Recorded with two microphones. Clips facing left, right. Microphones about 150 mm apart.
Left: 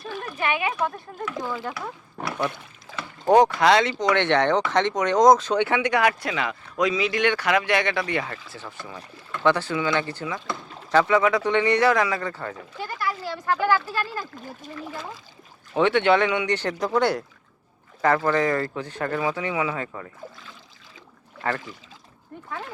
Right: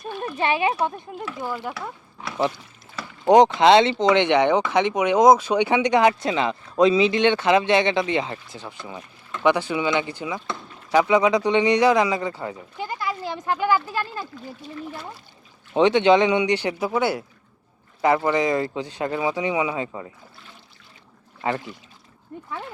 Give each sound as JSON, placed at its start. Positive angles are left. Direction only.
{"t": 0.3, "sound": "speech", "side_deg": -30}
{"t": 1.5, "sound": "speech", "side_deg": -5}
{"t": 2.2, "sound": "a sound", "side_deg": 50}
{"t": 2.9, "sound": "rowboat", "side_deg": 90}
{"t": 3.2, "sound": "speech", "side_deg": -20}
{"t": 15.7, "sound": "speech", "side_deg": -15}
{"t": 21.4, "sound": "speech", "side_deg": -15}